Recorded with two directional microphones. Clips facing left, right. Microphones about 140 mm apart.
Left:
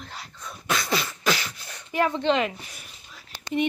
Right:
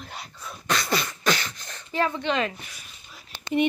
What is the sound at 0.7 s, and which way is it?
Beatboxing, centre (ahead or behind).